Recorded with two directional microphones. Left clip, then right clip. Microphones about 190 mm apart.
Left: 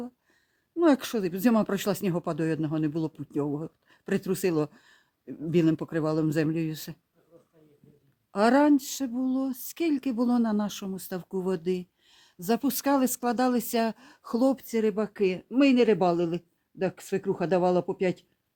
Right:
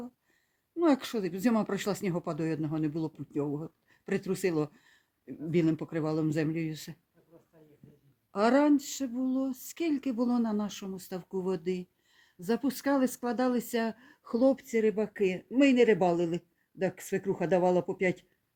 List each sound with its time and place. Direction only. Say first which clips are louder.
0.8 s speech: left 4 dB; 60° left (ahead or behind)
8.3 s speech: left 3 dB; 55° left (ahead or behind); by 18.3 s 40° left (ahead or behind)